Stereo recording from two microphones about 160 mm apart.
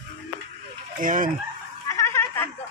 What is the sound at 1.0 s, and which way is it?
Speech, 55° right (ahead or behind).